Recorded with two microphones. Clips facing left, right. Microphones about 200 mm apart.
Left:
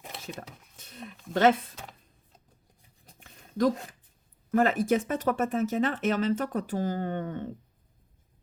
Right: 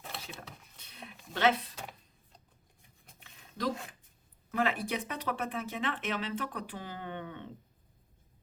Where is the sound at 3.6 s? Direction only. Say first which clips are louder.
Left 9 dB; 50° left (ahead or behind).